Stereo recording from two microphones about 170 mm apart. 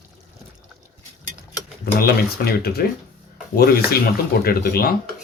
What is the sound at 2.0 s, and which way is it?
Speech, 65° left (ahead or behind).